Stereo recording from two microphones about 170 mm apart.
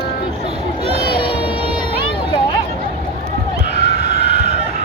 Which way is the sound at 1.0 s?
30° left (ahead or behind).